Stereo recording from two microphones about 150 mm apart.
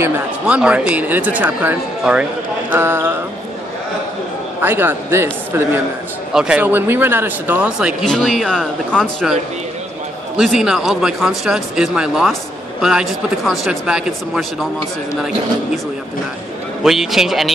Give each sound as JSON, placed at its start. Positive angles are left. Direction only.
{"t": 0.0, "sound": "speech", "side_deg": -10}
{"t": 4.6, "sound": "speech", "side_deg": -15}
{"t": 8.0, "sound": "speech", "side_deg": 0}
{"t": 10.3, "sound": "speech", "side_deg": 0}
{"t": 16.8, "sound": "speech", "side_deg": 0}